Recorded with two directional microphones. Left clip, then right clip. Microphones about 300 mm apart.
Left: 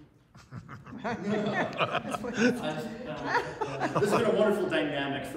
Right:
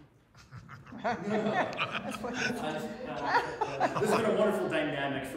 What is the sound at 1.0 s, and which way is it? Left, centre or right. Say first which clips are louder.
Speech: right 2 dB; centre.